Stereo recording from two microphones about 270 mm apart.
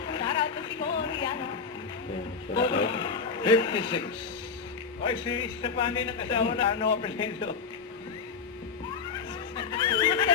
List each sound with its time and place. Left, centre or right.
0.1 s a sound: centre
2.6 s a man's voice: centre
5.0 s a man's voice: centre
9.6 s music: centre